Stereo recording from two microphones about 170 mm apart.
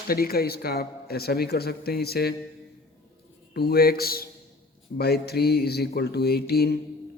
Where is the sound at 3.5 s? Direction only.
65° left (ahead or behind).